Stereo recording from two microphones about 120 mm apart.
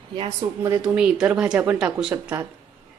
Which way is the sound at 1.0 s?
10° right (ahead or behind).